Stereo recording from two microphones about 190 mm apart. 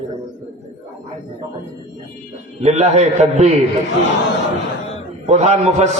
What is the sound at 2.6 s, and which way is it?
A man's voice, 35° right (ahead or behind).